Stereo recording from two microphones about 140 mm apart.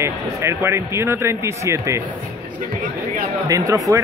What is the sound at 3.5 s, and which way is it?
Speech, 25° right (ahead or behind).